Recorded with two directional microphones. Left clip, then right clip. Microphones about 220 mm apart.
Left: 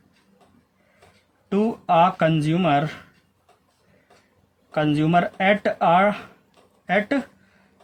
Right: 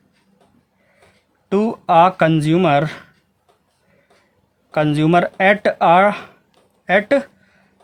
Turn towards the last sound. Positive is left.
turn(degrees=-50)  # may be behind; listen again after turning